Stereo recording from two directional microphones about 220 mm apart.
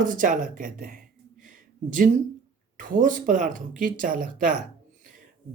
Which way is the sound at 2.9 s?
35° right (ahead or behind).